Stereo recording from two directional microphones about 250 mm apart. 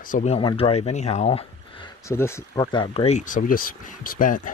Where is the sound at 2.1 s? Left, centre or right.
Centre.